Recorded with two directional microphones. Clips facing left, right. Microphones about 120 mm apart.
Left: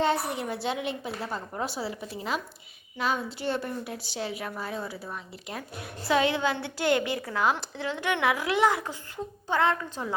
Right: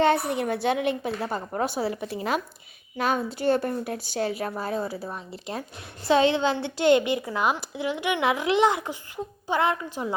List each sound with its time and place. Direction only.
0.0 s a woman's voice: 60° right (ahead or behind)
3.0 s a woman's voice: 50° right (ahead or behind)
5.1 s a woman's voice: 30° right (ahead or behind); by 10.2 s 15° right (ahead or behind)